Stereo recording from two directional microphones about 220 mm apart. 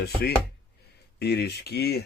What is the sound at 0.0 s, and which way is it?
Speech, 45° left (ahead or behind).